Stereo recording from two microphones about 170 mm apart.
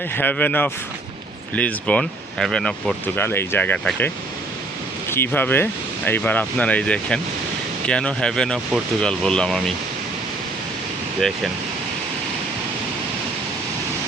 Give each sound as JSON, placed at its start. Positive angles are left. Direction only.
{"t": 0.1, "sound": "speech", "side_deg": 10}